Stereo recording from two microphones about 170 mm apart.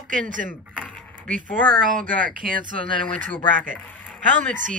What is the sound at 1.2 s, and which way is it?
Speech, 50° right (ahead or behind).